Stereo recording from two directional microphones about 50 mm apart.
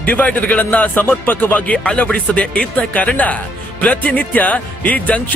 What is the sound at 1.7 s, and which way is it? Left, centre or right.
Speech, centre.